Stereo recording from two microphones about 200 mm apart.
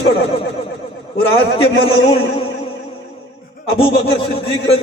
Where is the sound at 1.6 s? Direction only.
25° left (ahead or behind).